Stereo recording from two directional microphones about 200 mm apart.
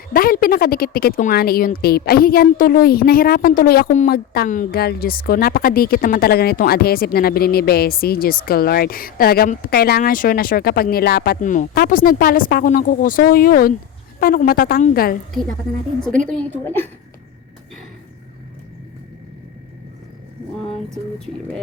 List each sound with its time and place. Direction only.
0.1 s a woman's voice: 45° left (ahead or behind)
16.0 s a woman's voice: 5° left (ahead or behind)